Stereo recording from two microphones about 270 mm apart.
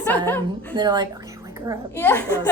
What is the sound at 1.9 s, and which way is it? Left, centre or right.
Speech, centre.